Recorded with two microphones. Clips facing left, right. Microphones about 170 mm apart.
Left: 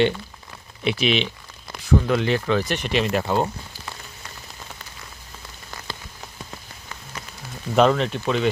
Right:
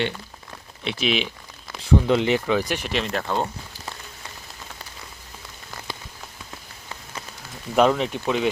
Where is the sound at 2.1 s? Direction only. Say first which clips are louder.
Right 1 dB; 20° right (ahead or behind); by 3.5 s 10° left (ahead or behind).